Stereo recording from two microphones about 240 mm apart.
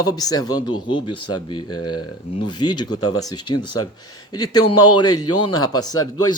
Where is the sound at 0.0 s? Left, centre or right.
Centre.